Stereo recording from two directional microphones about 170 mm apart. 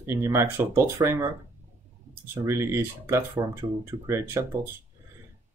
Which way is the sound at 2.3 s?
15° right (ahead or behind).